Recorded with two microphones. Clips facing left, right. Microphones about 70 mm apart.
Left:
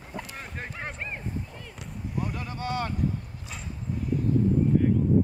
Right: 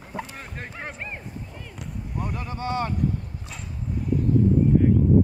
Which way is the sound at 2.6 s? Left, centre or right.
Right.